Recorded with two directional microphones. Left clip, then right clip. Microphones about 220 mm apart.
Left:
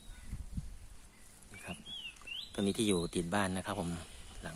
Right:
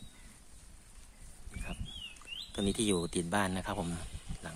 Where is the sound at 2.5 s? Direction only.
Centre (ahead or behind).